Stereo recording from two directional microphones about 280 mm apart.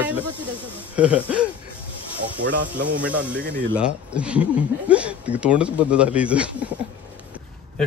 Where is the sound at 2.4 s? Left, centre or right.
Right.